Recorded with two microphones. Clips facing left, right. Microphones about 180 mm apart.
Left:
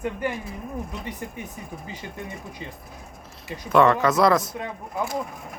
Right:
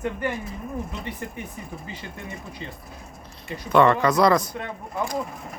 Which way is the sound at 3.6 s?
Centre (ahead or behind).